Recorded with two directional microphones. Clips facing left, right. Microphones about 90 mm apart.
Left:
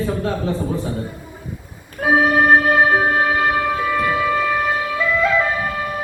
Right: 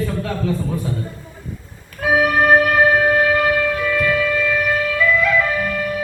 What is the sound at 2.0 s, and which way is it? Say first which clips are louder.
Music: left 1 dB; 30° left (ahead or behind).